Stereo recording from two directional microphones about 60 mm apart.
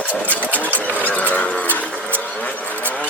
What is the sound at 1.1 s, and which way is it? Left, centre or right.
Vehicle, left.